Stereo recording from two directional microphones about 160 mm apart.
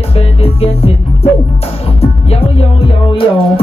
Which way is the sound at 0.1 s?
40° left (ahead or behind).